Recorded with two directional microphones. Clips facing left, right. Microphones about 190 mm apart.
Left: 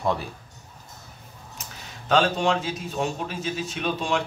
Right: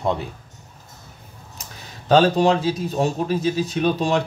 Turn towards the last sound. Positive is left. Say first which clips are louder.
# right 6 dB
turn(degrees=-40)  # may be behind; listen again after turning